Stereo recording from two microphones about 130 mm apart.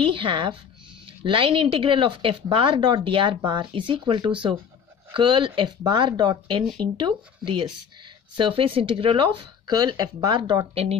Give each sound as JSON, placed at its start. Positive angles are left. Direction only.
{"t": 0.0, "sound": "speech", "side_deg": -40}
{"t": 10.7, "sound": "speech", "side_deg": -50}